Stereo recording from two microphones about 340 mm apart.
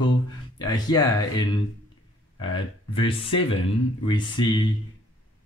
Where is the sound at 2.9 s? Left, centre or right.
Centre.